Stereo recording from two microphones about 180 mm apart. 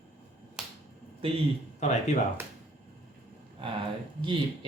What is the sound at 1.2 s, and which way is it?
Speech, 30° right (ahead or behind).